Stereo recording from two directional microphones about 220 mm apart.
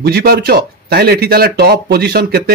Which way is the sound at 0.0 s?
45° right (ahead or behind).